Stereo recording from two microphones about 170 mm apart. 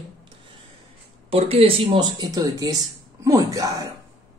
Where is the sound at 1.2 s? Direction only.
35° right (ahead or behind).